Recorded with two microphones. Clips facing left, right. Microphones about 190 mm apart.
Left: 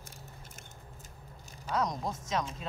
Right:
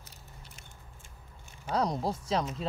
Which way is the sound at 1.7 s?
30° right (ahead or behind).